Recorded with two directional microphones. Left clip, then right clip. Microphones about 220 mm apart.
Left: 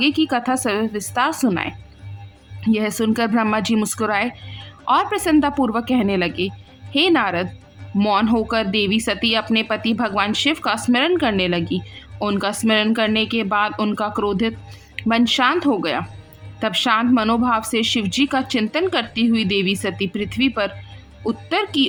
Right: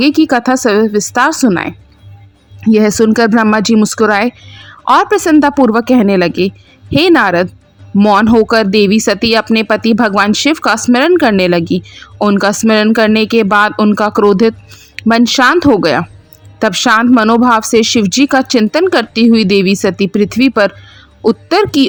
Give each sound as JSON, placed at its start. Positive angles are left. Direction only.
{"t": 0.0, "sound": "speech", "side_deg": -25}